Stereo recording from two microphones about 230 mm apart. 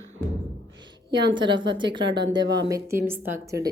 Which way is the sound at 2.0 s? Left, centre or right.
Right.